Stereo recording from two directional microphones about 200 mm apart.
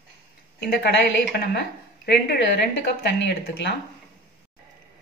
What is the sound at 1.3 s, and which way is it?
Speech, 50° left (ahead or behind).